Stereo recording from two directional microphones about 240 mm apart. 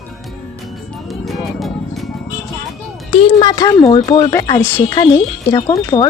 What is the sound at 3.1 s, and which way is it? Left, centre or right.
Speech, left.